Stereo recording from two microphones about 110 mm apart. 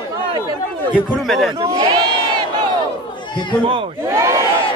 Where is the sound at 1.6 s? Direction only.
40° right (ahead or behind).